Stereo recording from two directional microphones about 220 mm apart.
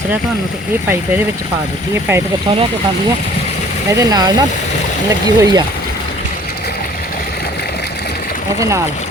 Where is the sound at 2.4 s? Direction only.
25° right (ahead or behind).